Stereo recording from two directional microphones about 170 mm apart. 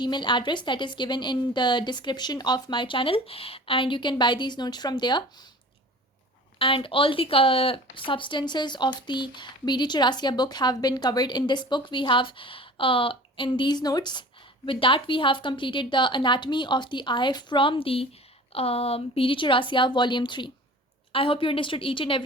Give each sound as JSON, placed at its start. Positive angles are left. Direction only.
{"t": 0.0, "sound": "a woman's voice", "side_deg": 25}
{"t": 6.6, "sound": "a woman's voice", "side_deg": 30}